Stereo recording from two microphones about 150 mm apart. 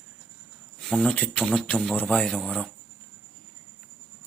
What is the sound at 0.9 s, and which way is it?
Speech, 5° left (ahead or behind).